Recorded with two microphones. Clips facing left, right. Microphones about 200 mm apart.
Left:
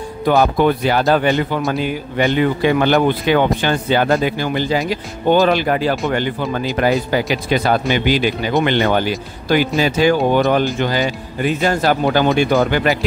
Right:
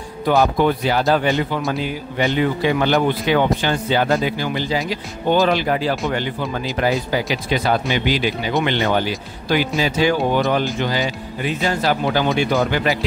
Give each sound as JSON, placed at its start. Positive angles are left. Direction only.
{"t": 0.4, "sound": "a man's voice", "side_deg": 60}